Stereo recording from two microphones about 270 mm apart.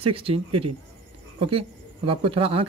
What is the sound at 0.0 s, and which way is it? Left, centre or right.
Speech, right.